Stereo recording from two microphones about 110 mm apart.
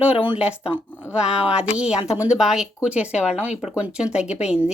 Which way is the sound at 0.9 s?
20° left (ahead or behind).